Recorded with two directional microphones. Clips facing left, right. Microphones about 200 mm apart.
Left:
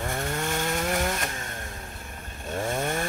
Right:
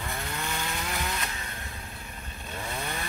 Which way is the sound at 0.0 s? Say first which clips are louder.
Left 6 dB; 45° left (ahead or behind).